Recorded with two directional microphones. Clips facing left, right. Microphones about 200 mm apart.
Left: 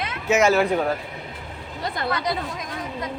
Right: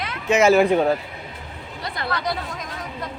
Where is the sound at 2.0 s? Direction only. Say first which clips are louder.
Even; 20° left (ahead or behind).